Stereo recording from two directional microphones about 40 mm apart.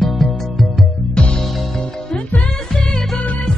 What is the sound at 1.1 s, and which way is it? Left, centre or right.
Music, left.